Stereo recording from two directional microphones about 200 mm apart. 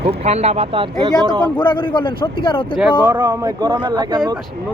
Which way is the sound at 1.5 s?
25° left (ahead or behind).